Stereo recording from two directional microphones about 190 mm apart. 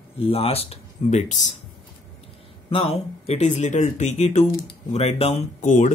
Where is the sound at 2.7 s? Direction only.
30° left (ahead or behind).